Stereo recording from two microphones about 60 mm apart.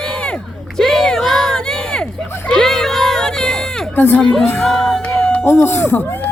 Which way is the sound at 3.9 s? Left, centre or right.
Left.